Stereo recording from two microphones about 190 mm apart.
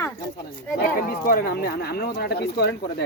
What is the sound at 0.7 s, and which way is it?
Speech, 50° left (ahead or behind).